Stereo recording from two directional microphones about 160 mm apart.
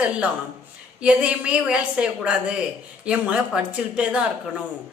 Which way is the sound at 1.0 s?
5° right (ahead or behind).